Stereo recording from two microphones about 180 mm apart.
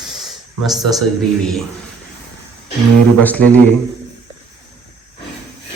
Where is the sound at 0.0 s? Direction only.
Centre (ahead or behind).